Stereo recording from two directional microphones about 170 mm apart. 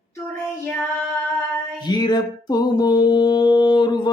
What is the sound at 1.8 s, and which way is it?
Music, 25° left (ahead or behind).